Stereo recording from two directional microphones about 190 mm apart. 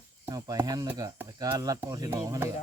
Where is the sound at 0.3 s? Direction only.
20° right (ahead or behind).